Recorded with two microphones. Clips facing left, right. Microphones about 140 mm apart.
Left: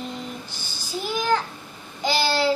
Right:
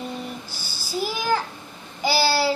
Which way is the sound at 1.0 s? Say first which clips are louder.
Left 1 dB; 5° right (ahead or behind).